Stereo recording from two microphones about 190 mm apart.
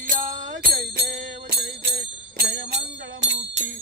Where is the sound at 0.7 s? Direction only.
55° right (ahead or behind).